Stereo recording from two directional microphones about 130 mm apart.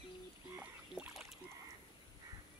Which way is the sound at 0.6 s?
5° right (ahead or behind).